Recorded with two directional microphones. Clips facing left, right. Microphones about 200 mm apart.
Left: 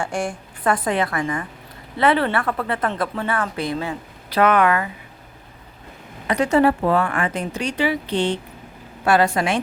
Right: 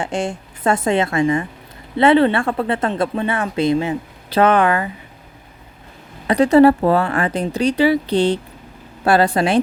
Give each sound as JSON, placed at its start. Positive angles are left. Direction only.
{"t": 0.0, "sound": "speech", "side_deg": -20}
{"t": 6.2, "sound": "speech", "side_deg": -35}